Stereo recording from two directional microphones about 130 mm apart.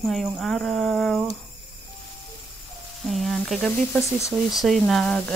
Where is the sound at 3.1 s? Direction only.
Centre (ahead or behind).